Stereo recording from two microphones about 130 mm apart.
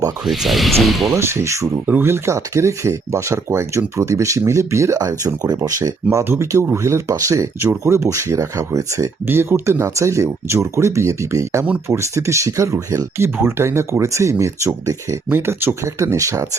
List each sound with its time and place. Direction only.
0.3 s speech: centre (ahead or behind)
1.1 s speech: 20° right (ahead or behind)